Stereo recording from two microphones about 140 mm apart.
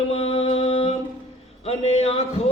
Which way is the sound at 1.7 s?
45° left (ahead or behind).